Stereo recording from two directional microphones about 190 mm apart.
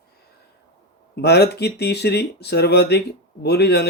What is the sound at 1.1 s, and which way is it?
Speech, 60° left (ahead or behind).